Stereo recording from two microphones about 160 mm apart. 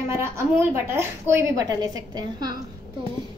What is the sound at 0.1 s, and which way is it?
A woman's voice, 15° right (ahead or behind).